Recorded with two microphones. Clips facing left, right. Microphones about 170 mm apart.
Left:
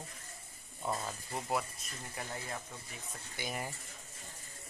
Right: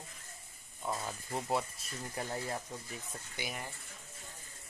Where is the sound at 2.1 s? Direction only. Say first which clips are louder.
Right 4 dB; 30° right (ahead or behind).